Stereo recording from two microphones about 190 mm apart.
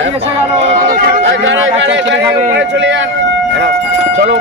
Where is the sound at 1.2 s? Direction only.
75° right (ahead or behind).